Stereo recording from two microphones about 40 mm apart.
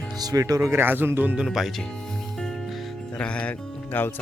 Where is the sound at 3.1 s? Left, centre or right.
Left.